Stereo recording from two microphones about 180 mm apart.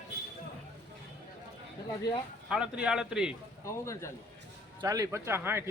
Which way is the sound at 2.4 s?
5° right (ahead or behind).